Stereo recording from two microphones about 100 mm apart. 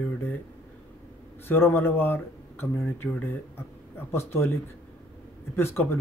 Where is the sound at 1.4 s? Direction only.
20° left (ahead or behind).